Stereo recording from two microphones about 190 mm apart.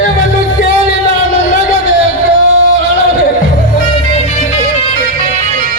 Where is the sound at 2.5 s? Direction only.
75° right (ahead or behind).